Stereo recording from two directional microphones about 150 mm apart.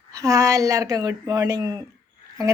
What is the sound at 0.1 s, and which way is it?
Speech, 20° right (ahead or behind).